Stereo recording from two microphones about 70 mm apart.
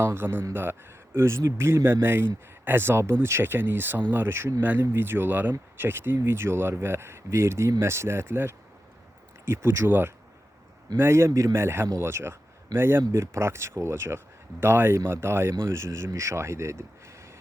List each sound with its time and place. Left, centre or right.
0.0 s speech: right